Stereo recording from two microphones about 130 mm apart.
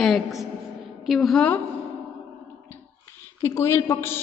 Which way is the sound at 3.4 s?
20° left (ahead or behind).